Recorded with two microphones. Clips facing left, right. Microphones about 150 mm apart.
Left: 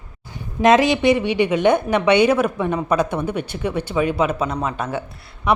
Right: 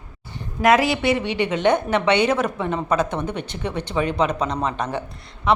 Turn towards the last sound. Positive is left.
turn(degrees=15)  # may be behind; listen again after turning